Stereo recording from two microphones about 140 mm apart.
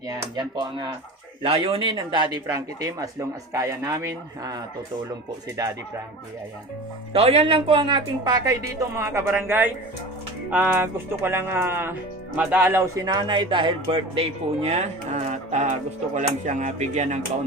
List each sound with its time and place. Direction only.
0.3 s a man's voice: 30° right (ahead or behind)
7.1 s a man's voice: 45° right (ahead or behind)